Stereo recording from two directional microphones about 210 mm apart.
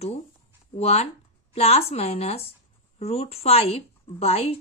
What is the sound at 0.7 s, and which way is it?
A woman's voice, 30° left (ahead or behind).